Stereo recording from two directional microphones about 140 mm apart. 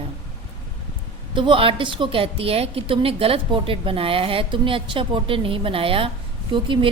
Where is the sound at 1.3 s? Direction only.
35° right (ahead or behind).